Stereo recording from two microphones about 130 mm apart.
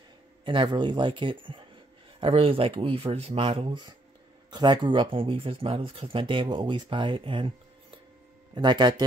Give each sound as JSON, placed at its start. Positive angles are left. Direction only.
{"t": 0.5, "sound": "speech", "side_deg": -40}
{"t": 8.5, "sound": "speech", "side_deg": -35}